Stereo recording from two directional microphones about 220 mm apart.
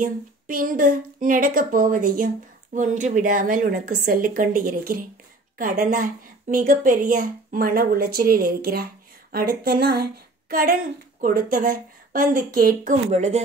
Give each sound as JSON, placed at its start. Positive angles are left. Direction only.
{"t": 0.0, "sound": "speech", "side_deg": -40}